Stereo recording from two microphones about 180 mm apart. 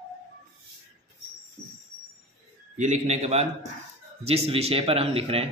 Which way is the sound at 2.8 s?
40° right (ahead or behind).